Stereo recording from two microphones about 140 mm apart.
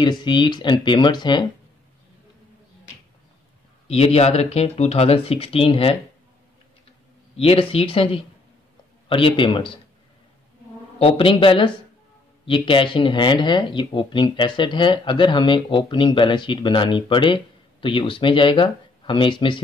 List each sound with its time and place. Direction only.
0.0 s speech: 35° left (ahead or behind)
3.8 s speech: 45° left (ahead or behind)
7.3 s speech: 40° left (ahead or behind)
11.0 s speech: 40° left (ahead or behind)